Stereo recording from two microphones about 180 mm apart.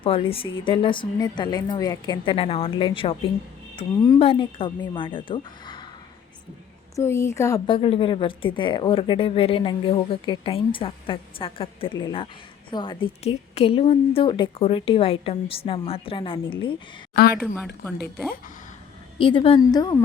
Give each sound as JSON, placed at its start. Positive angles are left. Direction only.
{"t": 0.0, "sound": "speech", "side_deg": 30}
{"t": 6.9, "sound": "speech", "side_deg": 15}
{"t": 7.7, "sound": "speech", "side_deg": 30}
{"t": 17.3, "sound": "speech", "side_deg": -5}
{"t": 18.0, "sound": "speech", "side_deg": 10}
{"t": 19.2, "sound": "speech", "side_deg": 30}